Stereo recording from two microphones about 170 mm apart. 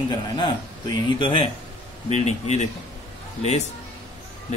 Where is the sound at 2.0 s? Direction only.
40° left (ahead or behind).